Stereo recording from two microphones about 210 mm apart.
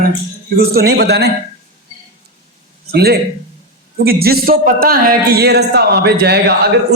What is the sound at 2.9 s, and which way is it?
Speech, 50° right (ahead or behind).